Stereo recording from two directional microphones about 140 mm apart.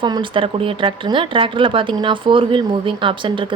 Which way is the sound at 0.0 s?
35° right (ahead or behind).